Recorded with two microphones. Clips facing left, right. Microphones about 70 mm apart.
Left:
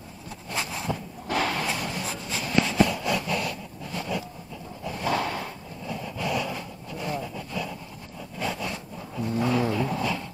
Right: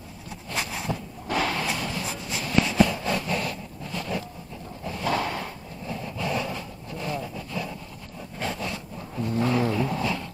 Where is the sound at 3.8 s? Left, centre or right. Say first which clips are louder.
Even; centre.